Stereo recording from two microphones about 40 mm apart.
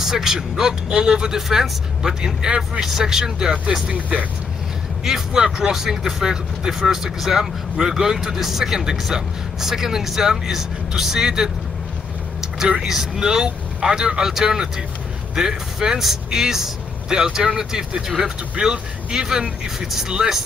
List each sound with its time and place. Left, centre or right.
0.0 s speech: centre
3.9 s speech: right
5.0 s speech: centre
12.8 s speech: centre
17.2 s speech: centre